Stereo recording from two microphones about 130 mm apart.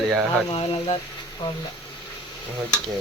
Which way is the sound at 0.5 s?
50° left (ahead or behind).